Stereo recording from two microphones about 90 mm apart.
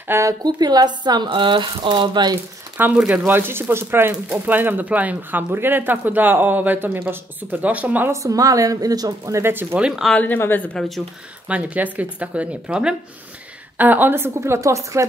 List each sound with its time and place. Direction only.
0.1 s speech: 35° right (ahead or behind)
0.4 s speech: 50° right (ahead or behind)
2.8 s speech: 20° right (ahead or behind)
8.1 s speech: 40° right (ahead or behind); by 9.8 s 20° right (ahead or behind)
10.1 s a woman's voice: 20° left (ahead or behind)
11.4 s speech: 15° right (ahead or behind); by 14.8 s 30° right (ahead or behind)